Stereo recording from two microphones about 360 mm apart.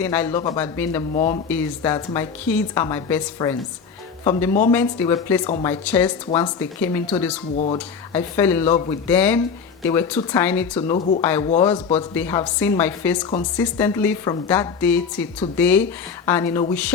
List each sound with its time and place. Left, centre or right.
0.0 s a woman's voice: centre
8.6 s a woman's voice: centre
9.0 s a woman's voice: centre
10.8 s a woman's voice: centre
11.2 s a woman's voice: centre